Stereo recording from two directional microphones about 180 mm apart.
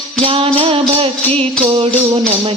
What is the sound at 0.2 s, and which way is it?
Music, 30° right (ahead or behind).